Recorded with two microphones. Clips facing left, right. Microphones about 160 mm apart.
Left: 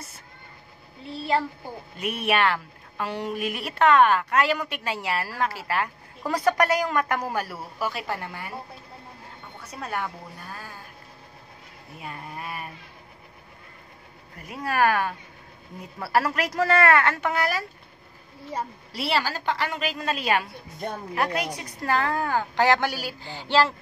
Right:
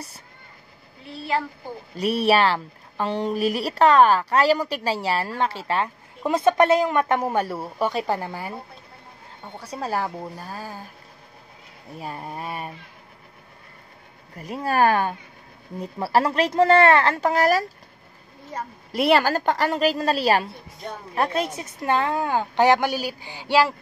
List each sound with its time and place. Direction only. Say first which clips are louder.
2.0 s speech: right 6 dB; 35° right (ahead or behind)
9.6 s speech: right 5 dB; 30° right (ahead or behind)
12.0 s speech: right 4 dB; 35° right (ahead or behind)
14.5 s a woman's voice: right 3 dB; 30° right (ahead or behind)
18.9 s a woman's voice: right 9 dB; 55° right (ahead or behind); by 23.7 s 15° right (ahead or behind)